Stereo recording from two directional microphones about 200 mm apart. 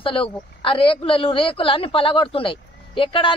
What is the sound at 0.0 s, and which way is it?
Speech, 25° left (ahead or behind).